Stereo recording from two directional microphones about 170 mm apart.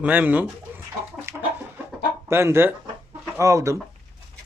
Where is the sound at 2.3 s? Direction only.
15° right (ahead or behind).